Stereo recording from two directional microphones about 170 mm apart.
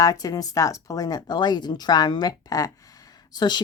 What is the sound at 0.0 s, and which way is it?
Speech, 20° left (ahead or behind).